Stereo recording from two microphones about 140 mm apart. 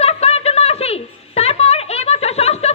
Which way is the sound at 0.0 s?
45° left (ahead or behind).